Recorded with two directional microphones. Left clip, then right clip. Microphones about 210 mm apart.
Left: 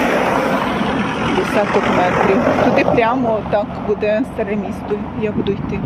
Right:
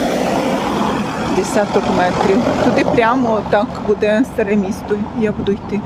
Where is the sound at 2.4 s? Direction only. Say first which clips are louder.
Left 1 dB; 40° right (ahead or behind).